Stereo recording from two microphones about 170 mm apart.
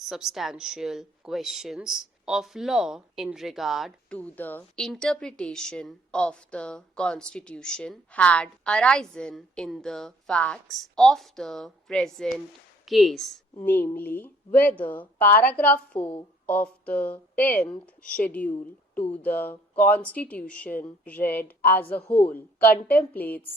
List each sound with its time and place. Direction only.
0.0 s speech: centre (ahead or behind)
4.2 s a woman's voice: 10° left (ahead or behind)